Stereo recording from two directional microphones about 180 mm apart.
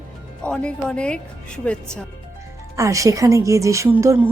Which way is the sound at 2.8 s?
20° right (ahead or behind).